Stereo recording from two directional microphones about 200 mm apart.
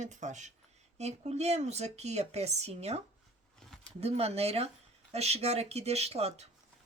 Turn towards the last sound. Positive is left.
turn(degrees=-30)  # may be behind; listen again after turning